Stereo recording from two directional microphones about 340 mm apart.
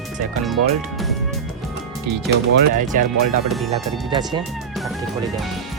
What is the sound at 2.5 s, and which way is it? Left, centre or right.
Speech, right.